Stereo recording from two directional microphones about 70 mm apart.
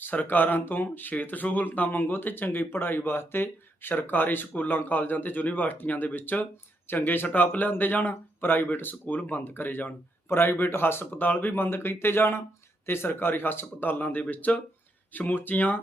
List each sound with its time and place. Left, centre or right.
0.0 s speech: left